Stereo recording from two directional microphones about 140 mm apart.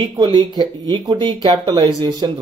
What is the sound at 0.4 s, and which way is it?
A man's voice, 30° right (ahead or behind).